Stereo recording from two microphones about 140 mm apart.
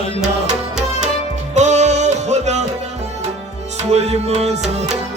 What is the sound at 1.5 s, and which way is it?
Music, 55° right (ahead or behind).